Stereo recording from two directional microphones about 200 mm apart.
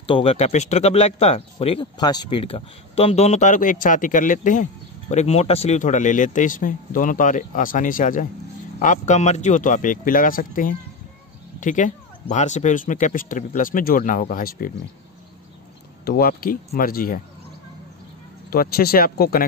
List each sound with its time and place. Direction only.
0.0 s speech: 30° left (ahead or behind); by 14.7 s 45° left (ahead or behind)
16.1 s speech: 45° left (ahead or behind)
18.5 s speech: 50° left (ahead or behind)